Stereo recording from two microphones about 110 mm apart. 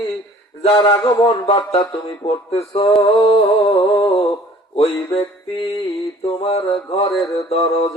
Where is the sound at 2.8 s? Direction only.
55° left (ahead or behind).